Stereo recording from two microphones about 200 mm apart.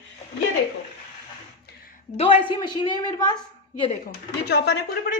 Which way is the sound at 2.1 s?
30° left (ahead or behind).